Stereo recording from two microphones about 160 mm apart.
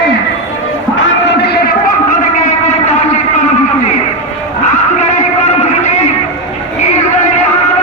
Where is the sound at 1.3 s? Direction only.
90° left; by 2.1 s 75° left (ahead or behind).